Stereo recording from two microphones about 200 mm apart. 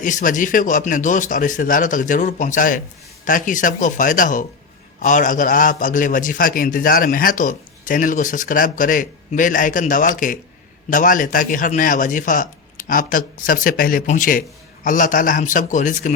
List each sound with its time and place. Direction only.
0.0 s a man's voice: 40° left (ahead or behind)